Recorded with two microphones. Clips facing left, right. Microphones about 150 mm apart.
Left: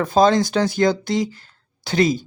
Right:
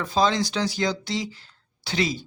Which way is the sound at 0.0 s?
50° left (ahead or behind).